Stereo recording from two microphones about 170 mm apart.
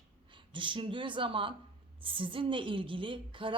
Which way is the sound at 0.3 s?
30° right (ahead or behind).